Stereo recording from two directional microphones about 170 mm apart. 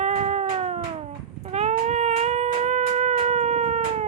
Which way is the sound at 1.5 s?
40° right (ahead or behind).